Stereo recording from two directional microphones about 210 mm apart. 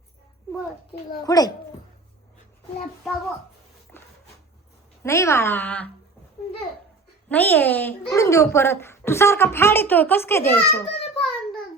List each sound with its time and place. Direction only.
1.2 s a child's voice: 20° left (ahead or behind)
3.9 s a sound: 10° left (ahead or behind)
5.0 s a child's voice: 15° left (ahead or behind)
7.3 s a child's voice: 10° left (ahead or behind)